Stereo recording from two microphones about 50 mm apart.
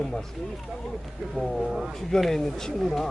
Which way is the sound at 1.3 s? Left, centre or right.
Centre.